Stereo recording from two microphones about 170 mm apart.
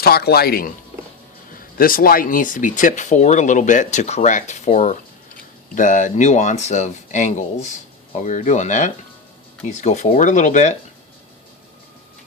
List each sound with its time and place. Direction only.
0.0 s speech: 65° left (ahead or behind); by 10.8 s 45° left (ahead or behind)